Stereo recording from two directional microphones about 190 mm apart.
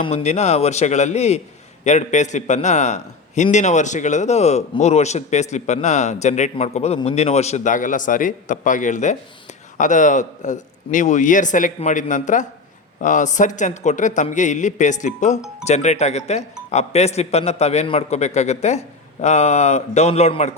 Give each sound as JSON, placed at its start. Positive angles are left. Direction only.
{"t": 0.0, "sound": "a man's voice", "side_deg": 35}